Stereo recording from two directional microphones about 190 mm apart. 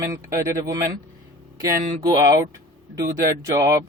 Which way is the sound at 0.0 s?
15° right (ahead or behind).